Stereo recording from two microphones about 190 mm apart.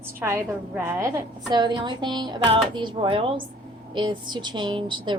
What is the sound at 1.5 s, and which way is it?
A woman's voice, 25° right (ahead or behind).